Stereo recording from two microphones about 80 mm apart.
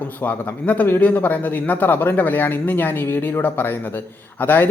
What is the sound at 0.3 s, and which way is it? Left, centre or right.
A man's voice, centre.